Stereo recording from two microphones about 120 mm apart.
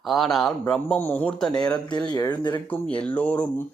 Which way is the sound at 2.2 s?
35° left (ahead or behind).